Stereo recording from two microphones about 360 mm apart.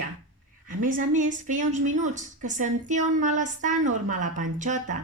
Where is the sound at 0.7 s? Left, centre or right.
Right.